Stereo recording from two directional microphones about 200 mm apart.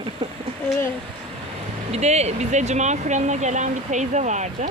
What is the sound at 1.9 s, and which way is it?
Speech, 35° right (ahead or behind).